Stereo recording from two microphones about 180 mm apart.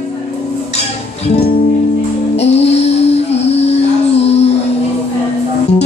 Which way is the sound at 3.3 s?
35° left (ahead or behind).